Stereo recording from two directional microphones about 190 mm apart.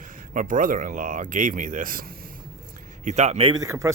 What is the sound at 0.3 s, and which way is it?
Speech, 45° right (ahead or behind).